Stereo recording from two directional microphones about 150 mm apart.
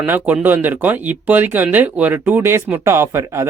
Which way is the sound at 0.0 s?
10° right (ahead or behind).